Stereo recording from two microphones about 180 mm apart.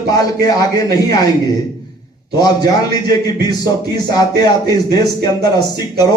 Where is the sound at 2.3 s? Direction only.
20° left (ahead or behind).